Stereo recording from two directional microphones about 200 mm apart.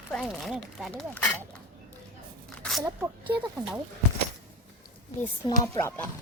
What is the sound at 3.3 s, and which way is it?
Speech, 5° right (ahead or behind).